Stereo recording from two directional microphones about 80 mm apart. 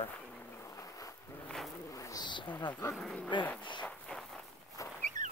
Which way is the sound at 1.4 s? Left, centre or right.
Centre.